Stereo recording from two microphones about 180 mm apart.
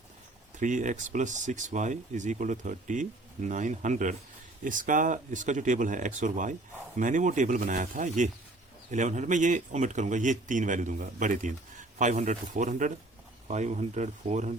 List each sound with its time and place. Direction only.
0.6 s speech: 45° right (ahead or behind)